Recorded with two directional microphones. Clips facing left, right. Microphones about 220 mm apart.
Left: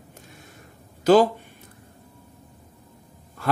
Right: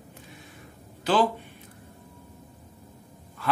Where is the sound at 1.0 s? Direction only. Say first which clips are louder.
Left 7 dB; 45° left (ahead or behind).